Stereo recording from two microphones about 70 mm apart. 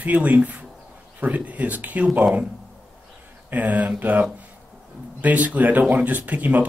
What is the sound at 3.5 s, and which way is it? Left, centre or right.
Speech, right.